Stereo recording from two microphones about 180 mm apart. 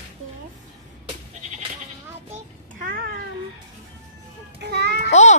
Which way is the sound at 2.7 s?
50° right (ahead or behind).